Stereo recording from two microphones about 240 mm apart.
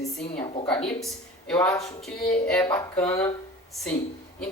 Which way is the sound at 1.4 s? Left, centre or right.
Centre.